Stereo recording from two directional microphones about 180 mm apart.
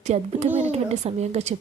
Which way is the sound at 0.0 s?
40° right (ahead or behind).